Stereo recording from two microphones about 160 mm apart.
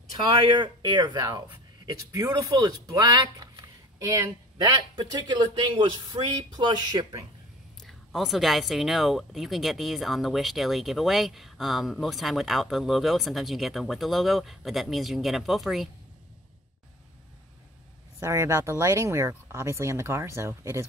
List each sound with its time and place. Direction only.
0.3 s speech: 30° right (ahead or behind)
7.8 s speech: centre (ahead or behind)
18.2 s speech: 20° right (ahead or behind)